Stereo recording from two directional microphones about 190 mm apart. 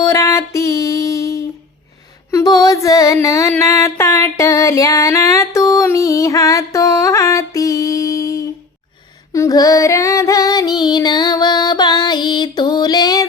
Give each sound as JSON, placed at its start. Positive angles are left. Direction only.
{"t": 0.0, "sound": "music", "side_deg": 15}
{"t": 9.3, "sound": "female singing", "side_deg": 15}